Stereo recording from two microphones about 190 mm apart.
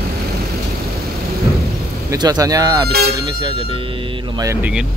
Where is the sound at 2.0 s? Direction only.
20° right (ahead or behind).